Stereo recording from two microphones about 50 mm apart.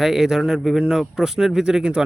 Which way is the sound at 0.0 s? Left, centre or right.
Centre.